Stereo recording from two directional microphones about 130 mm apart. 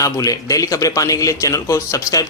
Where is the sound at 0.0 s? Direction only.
25° left (ahead or behind).